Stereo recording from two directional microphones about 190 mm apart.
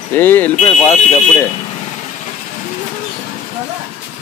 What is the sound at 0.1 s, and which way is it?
Speech, 10° left (ahead or behind).